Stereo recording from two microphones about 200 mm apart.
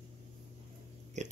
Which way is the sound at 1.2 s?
35° right (ahead or behind).